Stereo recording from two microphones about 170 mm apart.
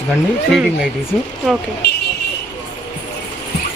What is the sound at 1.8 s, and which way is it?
Vehicle, 80° left.